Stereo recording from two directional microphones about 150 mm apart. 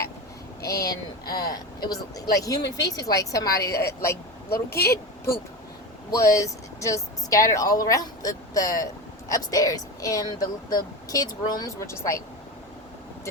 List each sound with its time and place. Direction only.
0.6 s speech: 20° left (ahead or behind)
4.4 s speech: 90° left
6.1 s speech: 20° left (ahead or behind)